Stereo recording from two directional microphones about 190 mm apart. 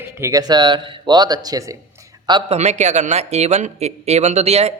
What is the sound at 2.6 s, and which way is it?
Speech, 35° right (ahead or behind).